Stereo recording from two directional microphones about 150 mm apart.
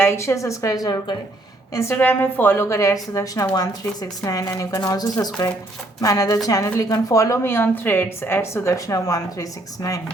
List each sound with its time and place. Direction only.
0.0 s a woman's voice: 15° left (ahead or behind)